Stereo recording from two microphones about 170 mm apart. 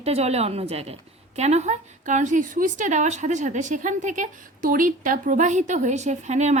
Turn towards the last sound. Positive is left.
turn(degrees=-40)  # may be behind; listen again after turning